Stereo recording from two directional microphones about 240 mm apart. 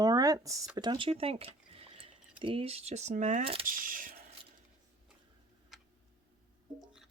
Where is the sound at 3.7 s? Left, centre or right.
Right.